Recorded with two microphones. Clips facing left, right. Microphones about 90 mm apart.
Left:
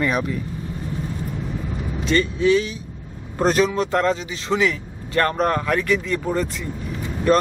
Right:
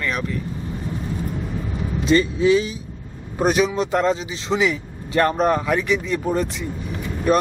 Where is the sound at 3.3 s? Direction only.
10° right (ahead or behind).